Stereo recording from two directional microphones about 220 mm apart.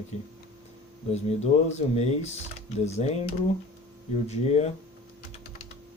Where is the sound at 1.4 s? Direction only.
30° left (ahead or behind).